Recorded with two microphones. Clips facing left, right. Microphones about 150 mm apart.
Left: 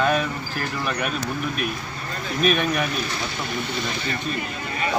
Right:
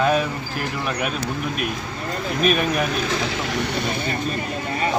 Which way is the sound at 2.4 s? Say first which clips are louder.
Right 1 dB; 5° right (ahead or behind).